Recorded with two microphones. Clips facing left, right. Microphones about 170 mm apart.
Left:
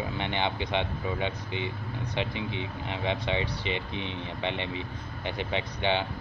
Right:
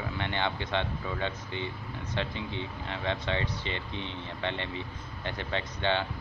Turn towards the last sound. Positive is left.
turn(degrees=15)  # may be behind; listen again after turning